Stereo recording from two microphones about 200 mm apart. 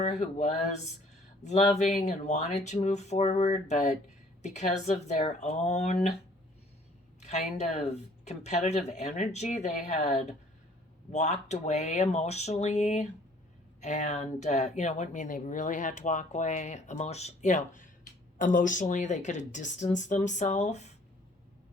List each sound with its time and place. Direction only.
0.0 s speech: 35° left (ahead or behind)
7.2 s speech: 35° left (ahead or behind)